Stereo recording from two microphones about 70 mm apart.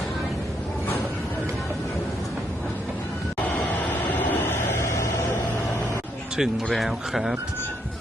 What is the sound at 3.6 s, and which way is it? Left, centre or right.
Vehicle, left.